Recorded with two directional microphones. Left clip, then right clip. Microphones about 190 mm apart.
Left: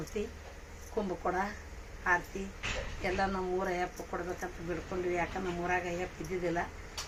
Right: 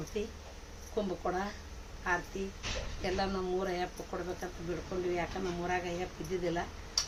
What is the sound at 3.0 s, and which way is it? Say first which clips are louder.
Speech: left 2 dB; centre (ahead or behind).